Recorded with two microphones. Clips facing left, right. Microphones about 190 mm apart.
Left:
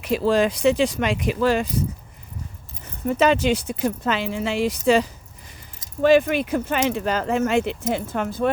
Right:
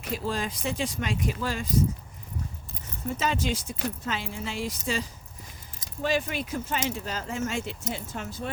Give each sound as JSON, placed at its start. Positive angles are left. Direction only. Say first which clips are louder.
{"t": 0.0, "sound": "speech", "louder": "left 11 dB", "side_deg": 80}
{"t": 3.1, "sound": "speech", "louder": "left 10 dB", "side_deg": 65}